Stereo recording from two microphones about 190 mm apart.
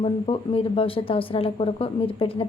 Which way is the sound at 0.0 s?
30° left (ahead or behind).